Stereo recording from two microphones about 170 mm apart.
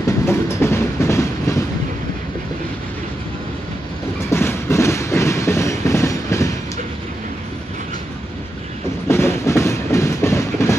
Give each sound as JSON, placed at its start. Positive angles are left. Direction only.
{"t": 0.3, "sound": "train", "side_deg": 15}
{"t": 4.3, "sound": "train", "side_deg": 15}
{"t": 9.0, "sound": "train", "side_deg": 15}